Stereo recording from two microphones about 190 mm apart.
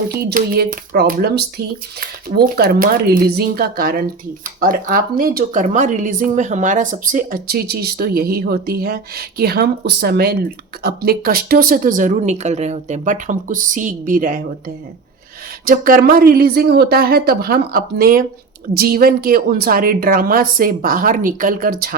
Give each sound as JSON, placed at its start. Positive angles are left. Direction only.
{"t": 0.3, "sound": "speech", "side_deg": -55}
{"t": 15.6, "sound": "speech", "side_deg": -50}